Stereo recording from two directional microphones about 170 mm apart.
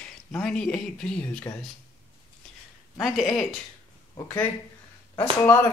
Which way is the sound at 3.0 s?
Centre (ahead or behind).